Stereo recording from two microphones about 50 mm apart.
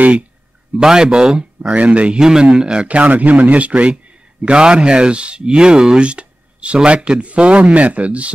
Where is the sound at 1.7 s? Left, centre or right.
Right.